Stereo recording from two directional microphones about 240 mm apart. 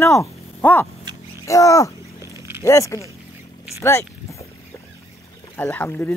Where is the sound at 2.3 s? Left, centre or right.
Centre.